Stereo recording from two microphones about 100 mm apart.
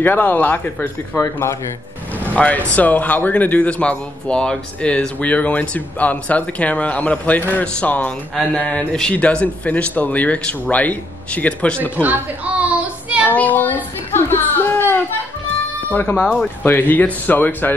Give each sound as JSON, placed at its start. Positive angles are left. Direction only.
{"t": 0.0, "sound": "speech", "side_deg": 20}
{"t": 2.3, "sound": "a man's voice", "side_deg": 15}
{"t": 12.0, "sound": "a sound", "side_deg": -15}
{"t": 13.3, "sound": "a man's voice", "side_deg": 15}
{"t": 14.1, "sound": "a sound", "side_deg": 20}
{"t": 15.9, "sound": "a man's voice", "side_deg": 15}